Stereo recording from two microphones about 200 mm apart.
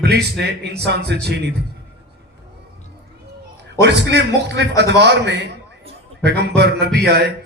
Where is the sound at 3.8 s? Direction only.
60° right (ahead or behind).